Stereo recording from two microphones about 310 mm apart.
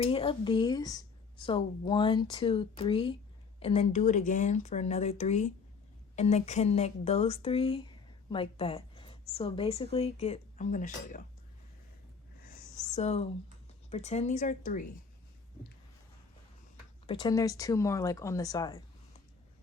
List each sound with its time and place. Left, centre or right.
0.0 s speech: centre
12.7 s a sound: centre
13.9 s speech: left
17.1 s speech: centre